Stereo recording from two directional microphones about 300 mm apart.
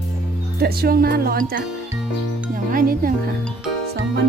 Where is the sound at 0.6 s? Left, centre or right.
Right.